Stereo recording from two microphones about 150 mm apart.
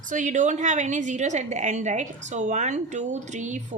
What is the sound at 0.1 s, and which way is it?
A woman's voice, 55° right (ahead or behind).